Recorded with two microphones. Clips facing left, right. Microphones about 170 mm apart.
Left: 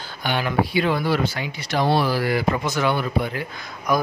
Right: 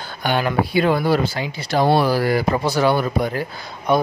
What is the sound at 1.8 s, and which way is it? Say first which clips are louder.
Speech: right 3 dB; 45° right (ahead or behind).